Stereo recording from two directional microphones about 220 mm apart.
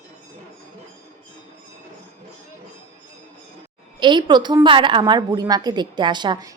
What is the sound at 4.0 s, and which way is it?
A woman's voice, 20° right (ahead or behind).